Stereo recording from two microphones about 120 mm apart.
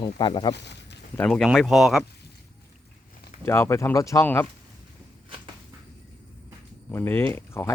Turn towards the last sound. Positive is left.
turn(degrees=20)  # may be behind; listen again after turning